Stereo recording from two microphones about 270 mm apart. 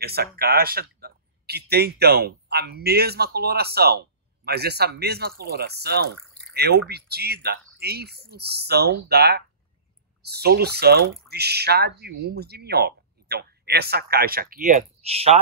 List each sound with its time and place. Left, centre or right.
0.0 s speech: right